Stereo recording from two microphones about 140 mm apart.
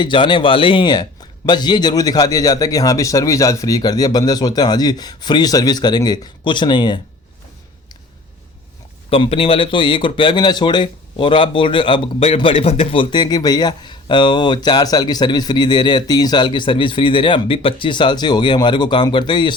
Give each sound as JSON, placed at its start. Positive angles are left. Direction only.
{"t": 0.0, "sound": "a man's voice", "side_deg": 35}
{"t": 9.0, "sound": "speech", "side_deg": 40}